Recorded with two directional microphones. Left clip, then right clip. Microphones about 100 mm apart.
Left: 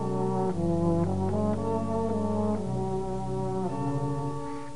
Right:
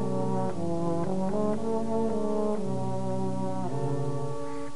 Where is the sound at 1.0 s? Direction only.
30° left (ahead or behind).